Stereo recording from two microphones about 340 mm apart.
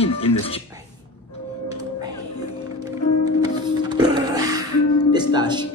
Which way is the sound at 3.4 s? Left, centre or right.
Centre.